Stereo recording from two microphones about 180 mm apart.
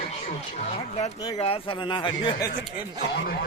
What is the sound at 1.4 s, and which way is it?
Speech, 30° left (ahead or behind).